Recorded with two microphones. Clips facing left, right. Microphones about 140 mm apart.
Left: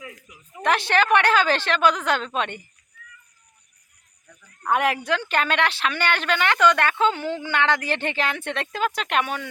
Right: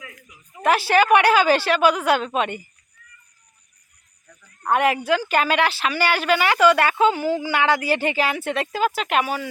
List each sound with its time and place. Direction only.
0.0 s a sound: 30° left (ahead or behind)
0.6 s a woman's voice: 5° right (ahead or behind)
4.7 s speech: centre (ahead or behind)